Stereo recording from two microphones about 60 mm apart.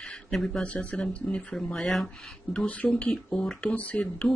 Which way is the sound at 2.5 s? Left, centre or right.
Left.